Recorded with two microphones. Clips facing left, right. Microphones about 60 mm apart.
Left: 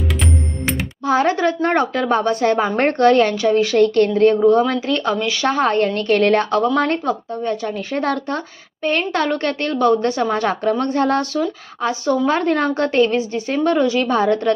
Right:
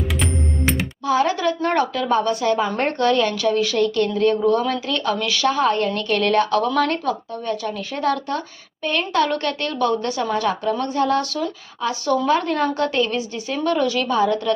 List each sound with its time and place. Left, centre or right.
0.2 s music: centre
1.0 s speech: left
14.1 s speech: left